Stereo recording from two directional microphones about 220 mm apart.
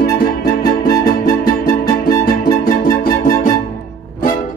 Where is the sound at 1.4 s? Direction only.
40° left (ahead or behind).